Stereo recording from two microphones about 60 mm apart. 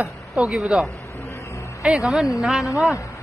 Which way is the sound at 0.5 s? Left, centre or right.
Centre.